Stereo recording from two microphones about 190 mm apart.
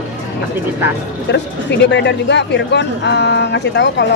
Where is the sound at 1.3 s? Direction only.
65° left (ahead or behind).